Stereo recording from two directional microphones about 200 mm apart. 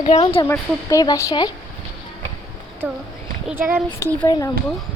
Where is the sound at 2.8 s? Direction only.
5° right (ahead or behind).